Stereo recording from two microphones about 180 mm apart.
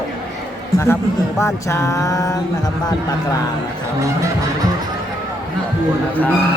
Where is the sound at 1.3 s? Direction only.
15° left (ahead or behind).